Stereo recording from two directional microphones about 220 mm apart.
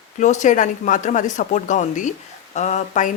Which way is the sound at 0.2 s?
35° left (ahead or behind).